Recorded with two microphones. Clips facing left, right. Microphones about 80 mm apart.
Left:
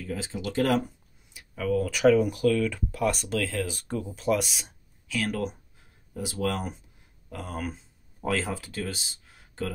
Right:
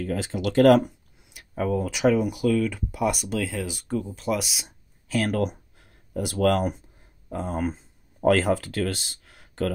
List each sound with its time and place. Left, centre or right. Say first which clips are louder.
0.0 s speech: right 6 dB; right
1.5 s speech: right 2 dB; right
1.8 s speech: left 2 dB; centre
5.0 s speech: right 5 dB; right
5.4 s a sound: right 5 dB; right
7.2 s speech: right 7 dB; right
7.7 s speech: right 3 dB; right